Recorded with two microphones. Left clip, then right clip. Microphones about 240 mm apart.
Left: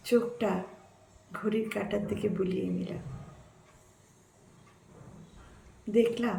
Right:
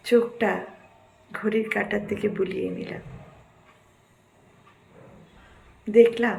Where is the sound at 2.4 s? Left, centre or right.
Centre.